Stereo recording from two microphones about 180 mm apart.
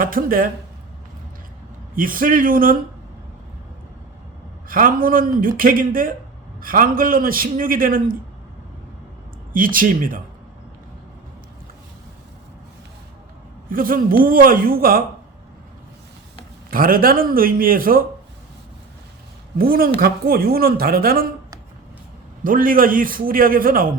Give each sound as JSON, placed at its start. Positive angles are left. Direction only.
{"t": 0.0, "sound": "a man's voice", "side_deg": -50}
{"t": 2.0, "sound": "a man's voice", "side_deg": -50}
{"t": 4.7, "sound": "a man's voice", "side_deg": -50}
{"t": 9.5, "sound": "a man's voice", "side_deg": -50}
{"t": 13.7, "sound": "a man's voice", "side_deg": -50}
{"t": 16.7, "sound": "a man's voice", "side_deg": -55}
{"t": 19.5, "sound": "a man's voice", "side_deg": -55}
{"t": 22.4, "sound": "a man's voice", "side_deg": -50}